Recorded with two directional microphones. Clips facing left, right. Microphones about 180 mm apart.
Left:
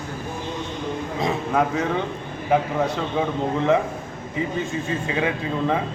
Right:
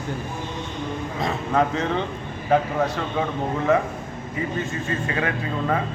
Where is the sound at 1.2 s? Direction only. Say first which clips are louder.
Even; 20° left (ahead or behind).